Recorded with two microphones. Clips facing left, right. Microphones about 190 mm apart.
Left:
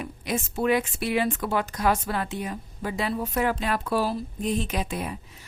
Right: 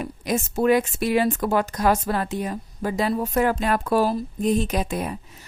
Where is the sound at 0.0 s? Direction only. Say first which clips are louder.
Right 4 dB; 45° right (ahead or behind).